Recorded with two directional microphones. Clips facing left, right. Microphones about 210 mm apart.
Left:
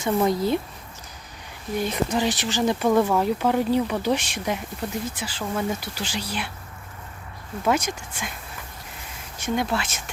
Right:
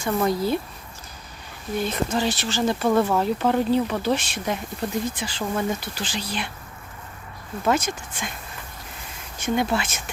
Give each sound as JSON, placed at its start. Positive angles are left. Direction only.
{"t": 0.0, "sound": "speech", "side_deg": 20}
{"t": 1.8, "sound": "speech", "side_deg": 15}
{"t": 7.6, "sound": "speech", "side_deg": 10}
{"t": 9.4, "sound": "speech", "side_deg": 0}